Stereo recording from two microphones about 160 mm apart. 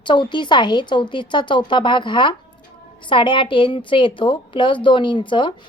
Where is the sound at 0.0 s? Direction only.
30° left (ahead or behind).